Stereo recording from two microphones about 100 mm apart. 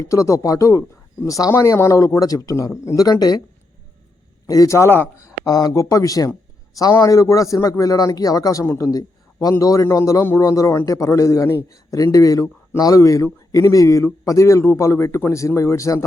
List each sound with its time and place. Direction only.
0.0 s a man's voice: 30° left (ahead or behind)
4.4 s speech: 35° left (ahead or behind)
5.5 s a man's voice: 40° left (ahead or behind)